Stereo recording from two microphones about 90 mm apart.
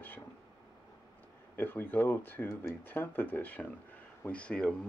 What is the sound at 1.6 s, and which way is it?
Speech, 20° left (ahead or behind).